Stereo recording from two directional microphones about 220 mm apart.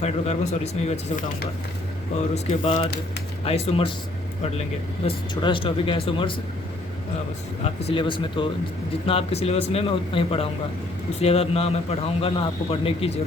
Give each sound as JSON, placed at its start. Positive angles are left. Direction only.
{"t": 0.0, "sound": "a man's voice", "side_deg": 30}
{"t": 2.3, "sound": "a man's voice", "side_deg": 30}
{"t": 5.0, "sound": "a man's voice", "side_deg": 20}
{"t": 7.6, "sound": "a man's voice", "side_deg": 30}